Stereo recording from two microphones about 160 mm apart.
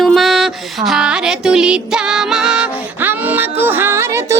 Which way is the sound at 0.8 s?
5° right (ahead or behind).